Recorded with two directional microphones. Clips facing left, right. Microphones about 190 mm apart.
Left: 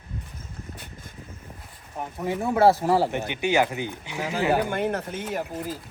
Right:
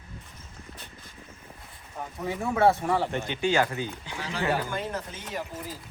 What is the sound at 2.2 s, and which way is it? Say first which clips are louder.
Speech: left 4 dB; 20° left (ahead or behind).